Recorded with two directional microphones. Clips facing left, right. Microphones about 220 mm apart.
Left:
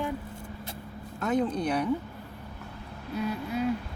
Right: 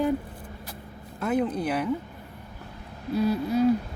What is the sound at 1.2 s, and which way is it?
Speech, 5° right (ahead or behind).